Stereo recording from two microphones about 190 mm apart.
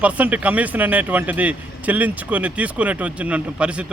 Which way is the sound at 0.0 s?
5° right (ahead or behind).